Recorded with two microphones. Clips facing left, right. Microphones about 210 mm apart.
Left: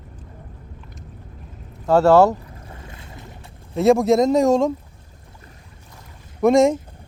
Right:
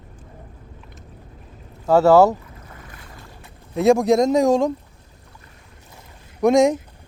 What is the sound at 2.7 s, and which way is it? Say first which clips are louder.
Boat: left 3 dB; 25° left (ahead or behind).